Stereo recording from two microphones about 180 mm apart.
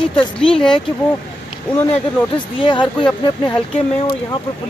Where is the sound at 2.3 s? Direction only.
25° left (ahead or behind).